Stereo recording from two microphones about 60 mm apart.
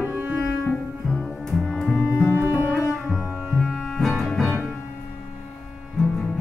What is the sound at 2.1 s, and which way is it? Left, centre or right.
Music, left.